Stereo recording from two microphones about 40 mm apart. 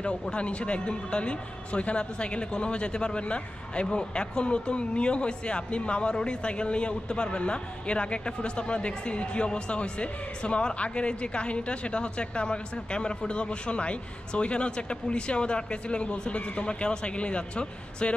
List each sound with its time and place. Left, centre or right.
0.3 s a man's voice: left